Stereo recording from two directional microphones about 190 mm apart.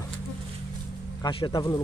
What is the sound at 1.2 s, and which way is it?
Speech, 25° left (ahead or behind).